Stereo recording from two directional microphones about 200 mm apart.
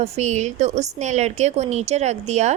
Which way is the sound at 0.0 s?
35° right (ahead or behind).